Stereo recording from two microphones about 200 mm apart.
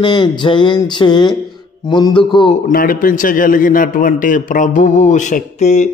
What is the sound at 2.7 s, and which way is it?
A man's voice, 45° left (ahead or behind).